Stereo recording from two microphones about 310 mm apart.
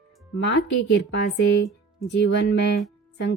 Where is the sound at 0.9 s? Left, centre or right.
Left.